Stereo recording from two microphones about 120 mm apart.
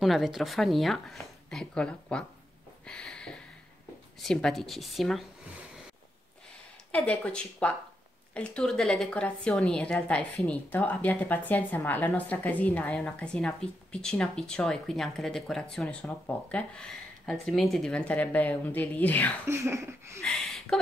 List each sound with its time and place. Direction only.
0.0 s speech: centre (ahead or behind)
2.9 s a sound: 5° left (ahead or behind)
4.2 s speech: 5° left (ahead or behind)
6.9 s a woman's voice: 10° left (ahead or behind)
19.4 s speech: 20° right (ahead or behind)
20.2 s speech: centre (ahead or behind)